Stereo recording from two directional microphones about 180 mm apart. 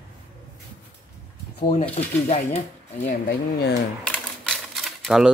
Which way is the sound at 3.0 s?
60° left (ahead or behind).